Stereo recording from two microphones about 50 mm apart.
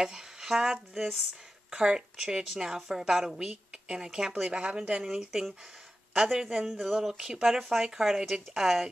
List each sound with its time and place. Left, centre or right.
0.0 s speech: centre
3.3 s speech: centre
5.1 s speech: centre